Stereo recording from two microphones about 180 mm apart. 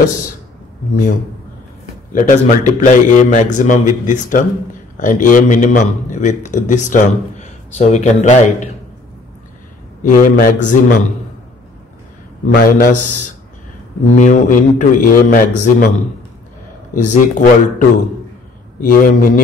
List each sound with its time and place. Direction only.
2.1 s a man's voice: 45° left (ahead or behind)
10.0 s a man's voice: 50° left (ahead or behind)
12.4 s a man's voice: 55° left (ahead or behind)
16.9 s a man's voice: 45° left (ahead or behind)